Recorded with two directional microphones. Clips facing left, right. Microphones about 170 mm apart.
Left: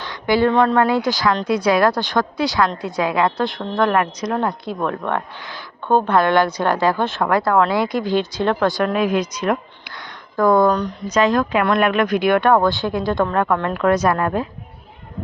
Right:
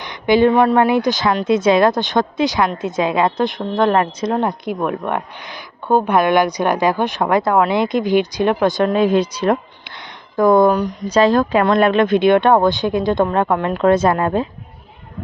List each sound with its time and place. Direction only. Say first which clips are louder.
0.0 s a woman's voice: right 4 dB; 20° right (ahead or behind)
10.7 s speech: right 3 dB; 10° right (ahead or behind)
11.0 s a woman's voice: right 3 dB; 30° right (ahead or behind)